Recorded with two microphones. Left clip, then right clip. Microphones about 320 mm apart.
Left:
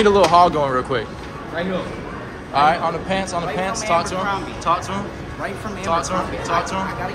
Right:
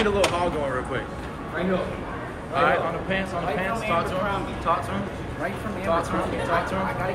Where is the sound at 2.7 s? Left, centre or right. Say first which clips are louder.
Left 5 dB; centre.